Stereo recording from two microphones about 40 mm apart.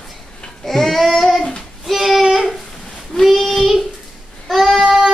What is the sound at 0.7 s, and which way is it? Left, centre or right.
Child singing, centre.